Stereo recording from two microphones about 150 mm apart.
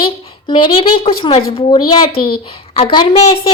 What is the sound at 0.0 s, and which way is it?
A woman's voice, 35° left (ahead or behind).